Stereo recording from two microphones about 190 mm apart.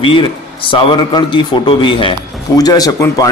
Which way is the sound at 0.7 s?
25° left (ahead or behind).